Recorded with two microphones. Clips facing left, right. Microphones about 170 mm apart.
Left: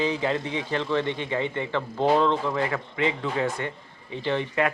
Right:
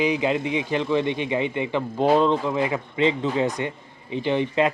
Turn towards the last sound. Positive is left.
turn(degrees=-20)  # may be behind; listen again after turning